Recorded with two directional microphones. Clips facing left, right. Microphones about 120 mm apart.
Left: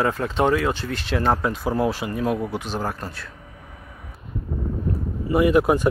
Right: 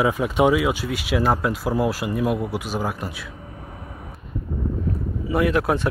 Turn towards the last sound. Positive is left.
turn(degrees=5)  # may be behind; listen again after turning